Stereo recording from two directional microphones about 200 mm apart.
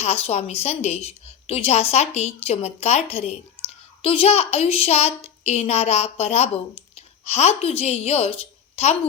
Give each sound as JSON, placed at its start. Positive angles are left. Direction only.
{"t": 0.0, "sound": "a woman's voice", "side_deg": 30}